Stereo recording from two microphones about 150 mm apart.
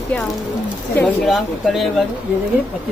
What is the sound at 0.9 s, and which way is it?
Speech, 10° left (ahead or behind).